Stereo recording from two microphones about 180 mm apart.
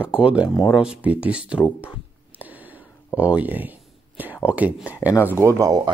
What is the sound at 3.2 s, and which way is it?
Speech, 10° right (ahead or behind).